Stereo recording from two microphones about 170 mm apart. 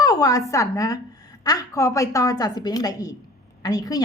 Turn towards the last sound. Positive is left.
turn(degrees=20)  # may be behind; listen again after turning